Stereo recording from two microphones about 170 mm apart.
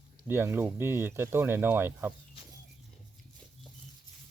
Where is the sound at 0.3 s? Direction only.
15° right (ahead or behind).